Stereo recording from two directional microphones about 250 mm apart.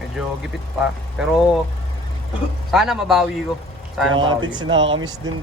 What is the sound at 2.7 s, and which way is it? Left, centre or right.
Speech, centre.